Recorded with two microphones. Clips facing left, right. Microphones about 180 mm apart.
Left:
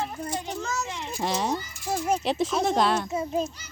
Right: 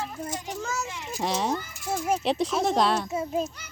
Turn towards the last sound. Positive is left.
turn(degrees=0)  # may be behind; listen again after turning